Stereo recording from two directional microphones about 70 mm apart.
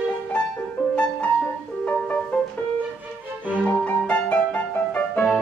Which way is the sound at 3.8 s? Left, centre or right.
Centre.